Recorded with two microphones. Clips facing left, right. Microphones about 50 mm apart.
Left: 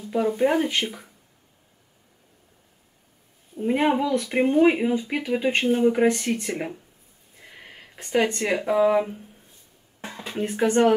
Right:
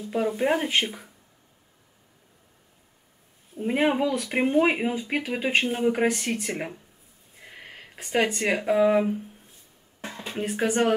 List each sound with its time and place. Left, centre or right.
0.1 s speech: centre
0.7 s speech: right
3.5 s speech: centre
10.0 s a sound: centre
10.3 s speech: centre